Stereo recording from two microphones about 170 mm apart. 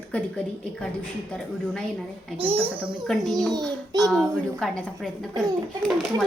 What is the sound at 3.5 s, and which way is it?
Child singing, 25° right (ahead or behind).